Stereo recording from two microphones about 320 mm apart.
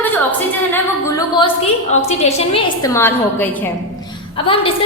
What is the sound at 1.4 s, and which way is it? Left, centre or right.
A woman's voice, centre.